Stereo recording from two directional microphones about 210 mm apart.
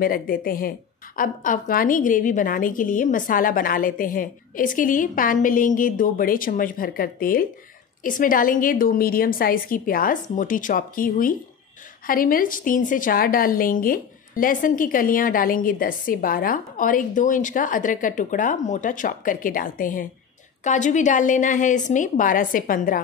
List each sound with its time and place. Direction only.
0.0 s a woman's voice: 45° left (ahead or behind)